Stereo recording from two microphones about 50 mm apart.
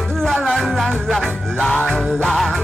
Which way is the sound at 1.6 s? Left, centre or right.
Left.